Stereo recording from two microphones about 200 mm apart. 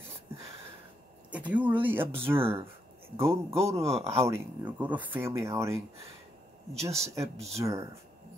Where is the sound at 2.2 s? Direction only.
25° right (ahead or behind).